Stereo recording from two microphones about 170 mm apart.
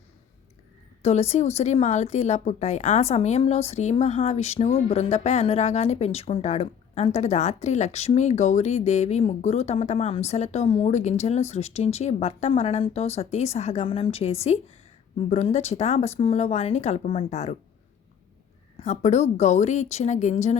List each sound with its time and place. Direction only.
1.0 s a woman's voice: 40° left (ahead or behind)
18.8 s speech: 40° left (ahead or behind)